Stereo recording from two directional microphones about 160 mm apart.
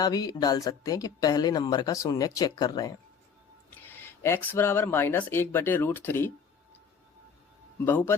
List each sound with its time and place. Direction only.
0.0 s speech: 25° left (ahead or behind)
3.8 s speech: 15° left (ahead or behind)
7.9 s speech: 10° left (ahead or behind)